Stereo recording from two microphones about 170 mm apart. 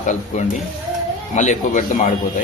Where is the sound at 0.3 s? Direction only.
45° left (ahead or behind).